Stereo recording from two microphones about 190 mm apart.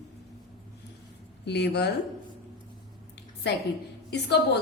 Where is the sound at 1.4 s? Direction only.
60° left (ahead or behind).